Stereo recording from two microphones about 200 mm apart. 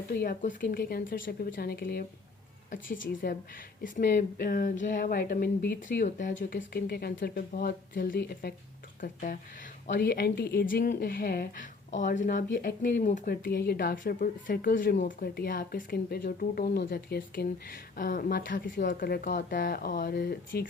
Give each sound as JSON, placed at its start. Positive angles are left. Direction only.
{"t": 0.1, "sound": "speech", "side_deg": 50}
{"t": 6.6, "sound": "speech", "side_deg": 50}